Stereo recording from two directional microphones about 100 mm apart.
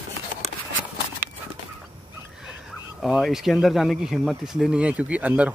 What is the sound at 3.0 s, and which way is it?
Speech, centre (ahead or behind).